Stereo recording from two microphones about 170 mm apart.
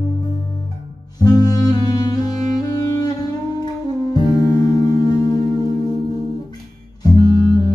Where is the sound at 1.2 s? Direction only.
20° left (ahead or behind).